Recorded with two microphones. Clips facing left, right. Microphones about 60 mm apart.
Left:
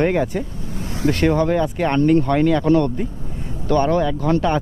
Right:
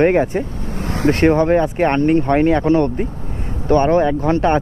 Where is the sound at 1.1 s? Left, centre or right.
Right.